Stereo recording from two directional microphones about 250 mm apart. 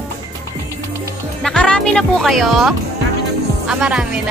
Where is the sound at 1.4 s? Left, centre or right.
Centre.